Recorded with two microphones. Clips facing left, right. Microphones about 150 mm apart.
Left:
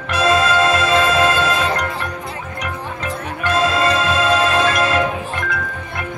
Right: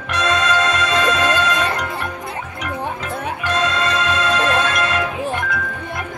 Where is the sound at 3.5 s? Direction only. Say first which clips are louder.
Left 4 dB; 5° left (ahead or behind).